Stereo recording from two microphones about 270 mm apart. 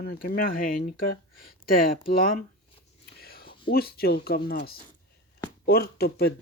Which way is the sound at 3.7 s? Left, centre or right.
Left.